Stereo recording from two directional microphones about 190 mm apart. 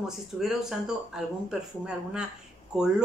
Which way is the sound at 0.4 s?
Centre (ahead or behind).